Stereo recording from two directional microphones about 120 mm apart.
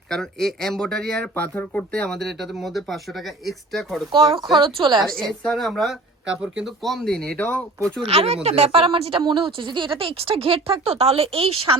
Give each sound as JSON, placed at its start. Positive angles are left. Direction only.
{"t": 0.1, "sound": "speech", "side_deg": 5}
{"t": 4.5, "sound": "speech", "side_deg": -40}
{"t": 4.9, "sound": "speech", "side_deg": 5}
{"t": 7.3, "sound": "speech", "side_deg": 15}
{"t": 8.0, "sound": "a woman's voice", "side_deg": -60}